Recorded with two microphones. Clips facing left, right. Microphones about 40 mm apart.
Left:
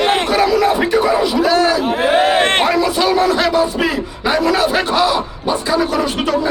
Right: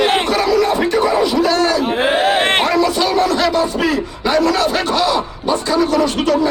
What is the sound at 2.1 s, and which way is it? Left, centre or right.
Music, centre.